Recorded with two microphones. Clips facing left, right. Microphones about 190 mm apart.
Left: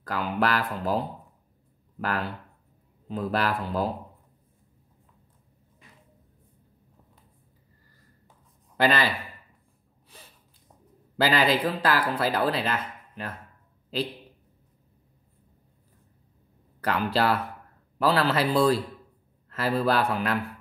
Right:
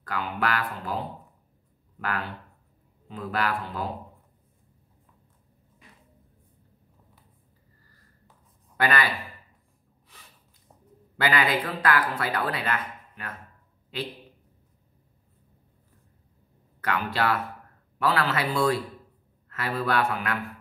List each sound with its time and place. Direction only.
0.0 s speech: 35° left (ahead or behind)
3.1 s speech: 35° left (ahead or behind)
8.7 s a man's voice: 25° left (ahead or behind)
11.1 s speech: 30° left (ahead or behind)
16.8 s speech: 35° left (ahead or behind)